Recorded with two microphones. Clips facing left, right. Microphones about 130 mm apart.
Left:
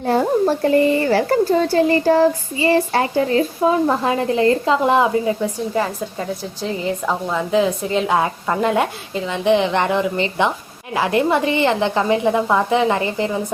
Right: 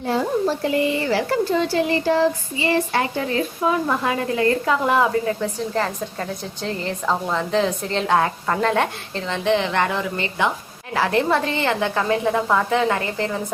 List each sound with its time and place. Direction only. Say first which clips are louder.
0.1 s a woman's voice: left 5 dB; 50° left (ahead or behind); by 13.3 s 20° left (ahead or behind)